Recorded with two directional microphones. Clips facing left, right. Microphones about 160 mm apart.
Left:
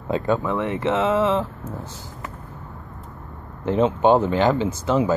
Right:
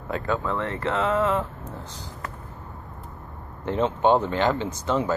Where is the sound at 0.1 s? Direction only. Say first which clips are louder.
Left 5 dB; 15° left (ahead or behind).